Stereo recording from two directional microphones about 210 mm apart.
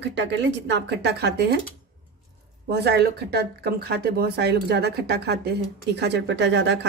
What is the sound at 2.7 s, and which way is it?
Speech, 50° right (ahead or behind).